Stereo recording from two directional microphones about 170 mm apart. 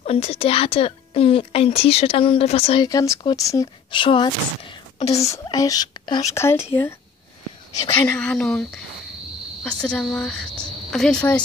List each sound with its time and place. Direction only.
0.0 s a woman's voice: 35° left (ahead or behind)
2.9 s speech: 20° left (ahead or behind)
3.9 s a woman's voice: 30° left (ahead or behind)
5.1 s speech: 20° left (ahead or behind)
7.9 s a woman's voice: 10° left (ahead or behind)